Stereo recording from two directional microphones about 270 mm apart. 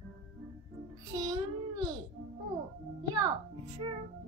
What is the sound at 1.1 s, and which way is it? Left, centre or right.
Speech, centre.